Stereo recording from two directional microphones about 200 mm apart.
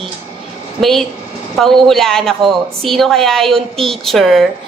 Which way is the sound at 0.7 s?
Centre (ahead or behind).